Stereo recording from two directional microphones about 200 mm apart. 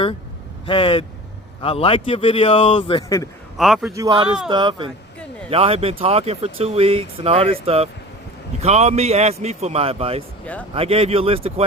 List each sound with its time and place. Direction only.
0.7 s speech: 25° left (ahead or behind)
3.6 s a man's voice: centre (ahead or behind)
3.9 s a man's voice: 15° right (ahead or behind)
10.4 s speech: 5° left (ahead or behind)
10.8 s speech: 30° right (ahead or behind)